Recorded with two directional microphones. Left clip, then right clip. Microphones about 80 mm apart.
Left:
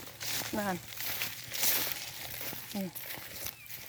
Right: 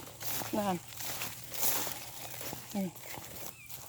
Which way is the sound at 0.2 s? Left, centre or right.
Right.